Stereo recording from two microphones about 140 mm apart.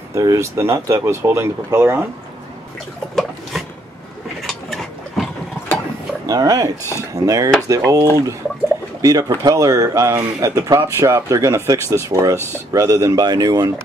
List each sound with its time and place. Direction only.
0.1 s speech: 25° right (ahead or behind)
4.4 s gears: centre (ahead or behind)
6.2 s speech: 25° right (ahead or behind)